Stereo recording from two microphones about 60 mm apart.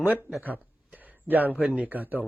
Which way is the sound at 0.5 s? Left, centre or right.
Right.